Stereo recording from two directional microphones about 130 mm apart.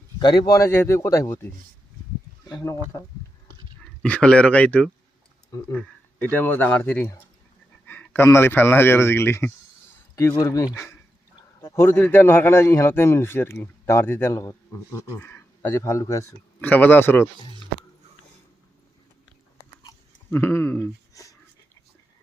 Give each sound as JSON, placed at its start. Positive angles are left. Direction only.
{"t": 0.2, "sound": "a man's voice", "side_deg": 35}
{"t": 2.5, "sound": "speech", "side_deg": 35}
{"t": 3.8, "sound": "speech", "side_deg": 10}
{"t": 5.5, "sound": "a man's voice", "side_deg": 25}
{"t": 6.3, "sound": "a man's voice", "side_deg": 15}
{"t": 15.2, "sound": "a sound", "side_deg": 15}
{"t": 15.8, "sound": "a man's voice", "side_deg": 25}
{"t": 16.6, "sound": "a man's voice", "side_deg": 15}
{"t": 19.6, "sound": "biting", "side_deg": 25}
{"t": 20.3, "sound": "speech", "side_deg": 20}